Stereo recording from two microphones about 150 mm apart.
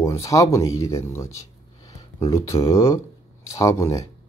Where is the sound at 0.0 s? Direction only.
20° left (ahead or behind).